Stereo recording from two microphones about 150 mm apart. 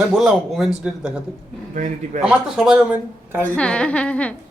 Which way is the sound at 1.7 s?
55° right (ahead or behind).